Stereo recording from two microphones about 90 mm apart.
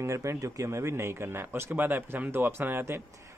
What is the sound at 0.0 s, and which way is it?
A man's voice, 35° right (ahead or behind).